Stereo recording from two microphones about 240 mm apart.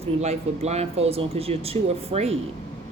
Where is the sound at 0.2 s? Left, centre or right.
Right.